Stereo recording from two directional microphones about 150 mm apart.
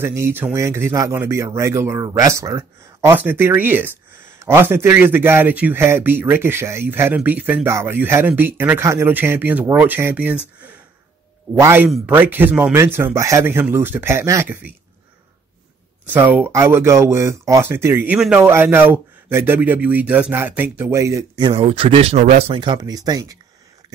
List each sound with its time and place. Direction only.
0.0 s a man's voice: 15° right (ahead or behind)
11.6 s a man's voice: 15° right (ahead or behind)
16.1 s a man's voice: 10° right (ahead or behind)
21.5 s speech: 35° right (ahead or behind)
22.5 s speech: 30° right (ahead or behind)